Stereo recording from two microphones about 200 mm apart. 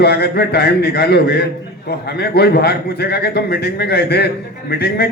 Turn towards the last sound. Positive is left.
turn(degrees=50)  # may be behind; listen again after turning